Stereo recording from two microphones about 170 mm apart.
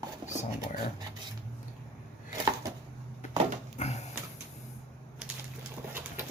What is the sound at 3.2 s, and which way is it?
Dog, 45° left (ahead or behind).